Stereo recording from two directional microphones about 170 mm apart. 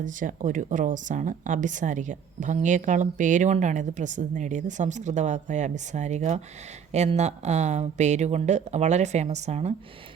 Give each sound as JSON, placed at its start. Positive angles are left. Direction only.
{"t": 0.0, "sound": "speech", "side_deg": -50}